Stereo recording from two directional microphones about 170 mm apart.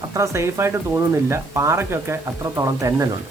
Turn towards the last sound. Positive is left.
turn(degrees=-20)  # may be behind; listen again after turning